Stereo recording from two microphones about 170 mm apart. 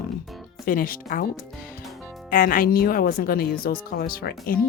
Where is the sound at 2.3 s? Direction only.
55° left (ahead or behind).